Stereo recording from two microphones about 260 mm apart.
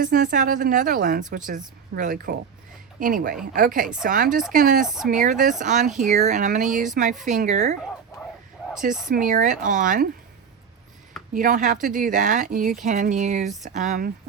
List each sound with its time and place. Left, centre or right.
0.0 s a woman's voice: right
4.9 s speech: centre
5.1 s speech: right
9.0 s a woman's voice: right
11.3 s a woman's voice: right